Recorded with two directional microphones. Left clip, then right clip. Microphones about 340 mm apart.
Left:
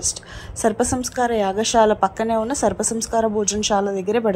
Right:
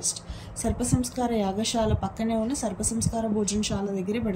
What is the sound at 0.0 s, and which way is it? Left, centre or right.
A woman's voice, centre.